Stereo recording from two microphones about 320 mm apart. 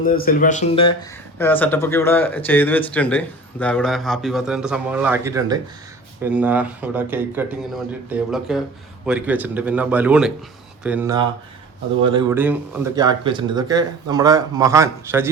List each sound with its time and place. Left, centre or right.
0.0 s speech: left
1.4 s a man's voice: centre